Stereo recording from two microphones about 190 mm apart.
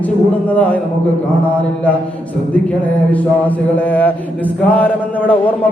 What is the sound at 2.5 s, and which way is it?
Mantra, 10° left (ahead or behind).